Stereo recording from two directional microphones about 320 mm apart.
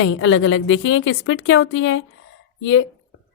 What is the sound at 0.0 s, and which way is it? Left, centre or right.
A woman's voice, left.